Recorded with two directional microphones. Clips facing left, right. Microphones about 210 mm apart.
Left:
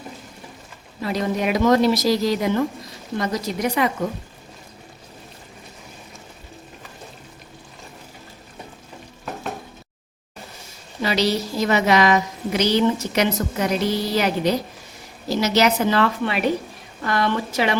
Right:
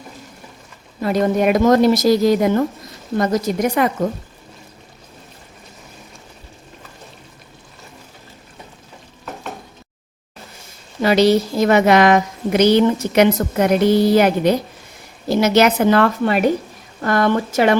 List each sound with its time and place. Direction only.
1.0 s a woman's voice: 50° right (ahead or behind)
11.0 s a woman's voice: 50° right (ahead or behind)